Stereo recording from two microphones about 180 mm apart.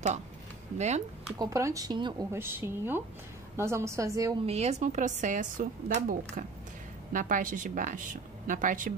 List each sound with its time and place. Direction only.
0.7 s speech: 40° right (ahead or behind)
1.4 s speech: 15° right (ahead or behind)
2.3 s a woman's voice: 15° right (ahead or behind)
4.5 s speech: 35° right (ahead or behind)